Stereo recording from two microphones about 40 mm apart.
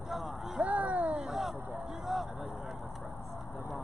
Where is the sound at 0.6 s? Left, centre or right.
Right.